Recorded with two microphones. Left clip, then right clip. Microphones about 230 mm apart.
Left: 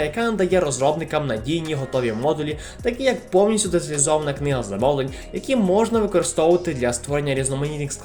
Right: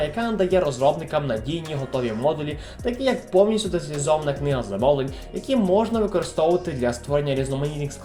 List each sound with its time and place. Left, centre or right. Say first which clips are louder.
0.0 s speech: left 2 dB; left